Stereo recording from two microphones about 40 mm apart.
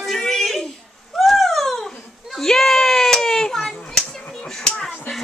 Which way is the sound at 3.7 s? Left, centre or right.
Centre.